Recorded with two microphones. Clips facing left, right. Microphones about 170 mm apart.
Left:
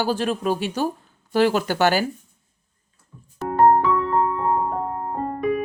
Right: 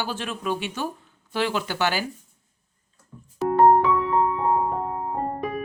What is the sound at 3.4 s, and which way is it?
Music, centre (ahead or behind).